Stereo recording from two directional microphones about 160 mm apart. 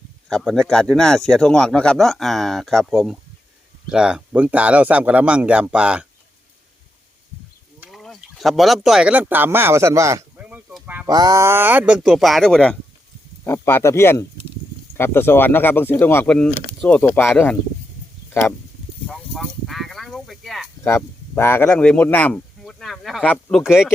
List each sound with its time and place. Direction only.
0.3 s speech: 5° left (ahead or behind)
7.9 s speech: centre (ahead or behind)
11.1 s speech: 20° right (ahead or behind); by 12.7 s 5° left (ahead or behind)
13.4 s speech: 15° left (ahead or behind)
19.0 s a sound: 5° left (ahead or behind)
20.8 s speech: 15° left (ahead or behind); by 23.9 s 5° right (ahead or behind)